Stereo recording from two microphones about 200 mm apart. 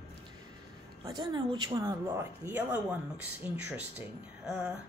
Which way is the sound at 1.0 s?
20° right (ahead or behind).